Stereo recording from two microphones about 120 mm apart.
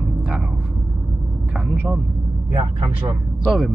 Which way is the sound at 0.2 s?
5° right (ahead or behind).